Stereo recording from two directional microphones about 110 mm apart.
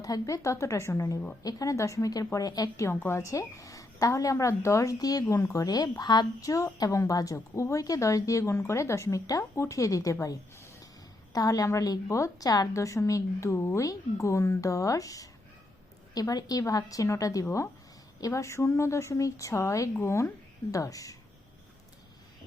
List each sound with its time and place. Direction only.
0.0 s a woman's voice: 30° left (ahead or behind)
11.3 s a woman's voice: 35° left (ahead or behind)